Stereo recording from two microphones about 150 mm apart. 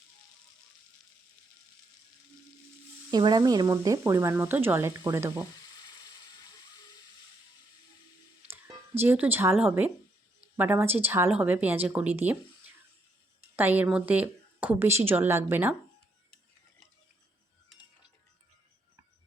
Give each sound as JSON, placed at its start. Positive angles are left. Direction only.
{"t": 3.1, "sound": "speech", "side_deg": -30}
{"t": 5.6, "sound": "a sound", "side_deg": 30}
{"t": 8.4, "sound": "speech", "side_deg": -15}